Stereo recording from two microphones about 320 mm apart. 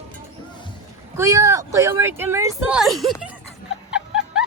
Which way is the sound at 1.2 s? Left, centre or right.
Centre.